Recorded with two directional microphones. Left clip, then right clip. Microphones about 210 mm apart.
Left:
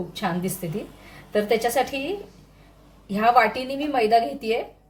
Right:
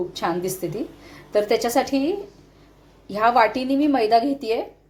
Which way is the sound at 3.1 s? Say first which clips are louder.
Right 1 dB; 25° right (ahead or behind).